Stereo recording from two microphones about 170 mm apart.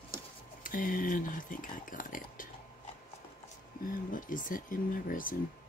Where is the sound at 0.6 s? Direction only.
55° left (ahead or behind).